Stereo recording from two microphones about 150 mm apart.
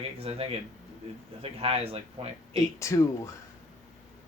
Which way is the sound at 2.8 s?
20° left (ahead or behind).